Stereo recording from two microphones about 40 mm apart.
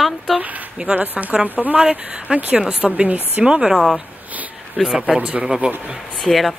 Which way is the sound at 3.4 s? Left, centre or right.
Right.